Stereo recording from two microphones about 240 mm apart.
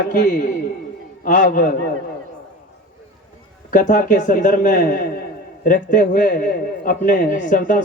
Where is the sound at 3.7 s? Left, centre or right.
Left.